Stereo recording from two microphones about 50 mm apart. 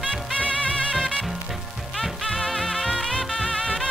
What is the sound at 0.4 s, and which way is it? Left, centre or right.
Music, centre.